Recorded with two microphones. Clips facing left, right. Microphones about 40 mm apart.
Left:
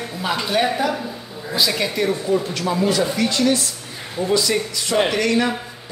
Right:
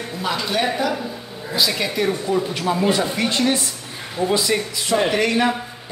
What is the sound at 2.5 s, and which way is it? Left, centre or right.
A man's voice, centre.